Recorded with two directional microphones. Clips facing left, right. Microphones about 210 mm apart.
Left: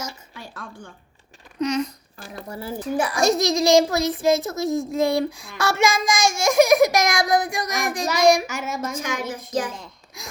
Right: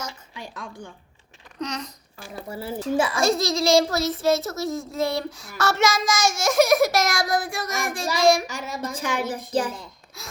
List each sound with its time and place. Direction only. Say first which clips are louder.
0.3 s a woman's voice: right 1 dB; 15° right (ahead or behind)
2.5 s a child's voice: right 1 dB; 25° right (ahead or behind)
3.2 s child singing: left 2 dB; 15° left (ahead or behind)
8.4 s speech: left 3 dB; centre (ahead or behind)
9.0 s speech: right 1 dB; 30° right (ahead or behind)